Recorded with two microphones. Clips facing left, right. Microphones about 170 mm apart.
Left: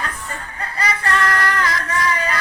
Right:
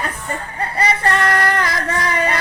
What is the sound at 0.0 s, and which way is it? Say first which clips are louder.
Music: right 4 dB; 30° right (ahead or behind).